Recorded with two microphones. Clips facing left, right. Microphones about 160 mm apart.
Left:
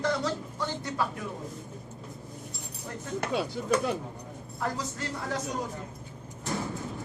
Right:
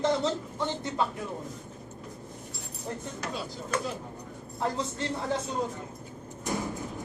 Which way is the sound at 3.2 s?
65° left (ahead or behind).